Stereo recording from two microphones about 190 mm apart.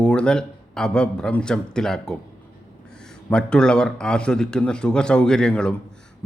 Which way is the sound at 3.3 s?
5° left (ahead or behind).